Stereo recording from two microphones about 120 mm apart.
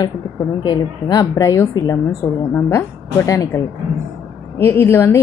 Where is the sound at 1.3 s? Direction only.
25° left (ahead or behind).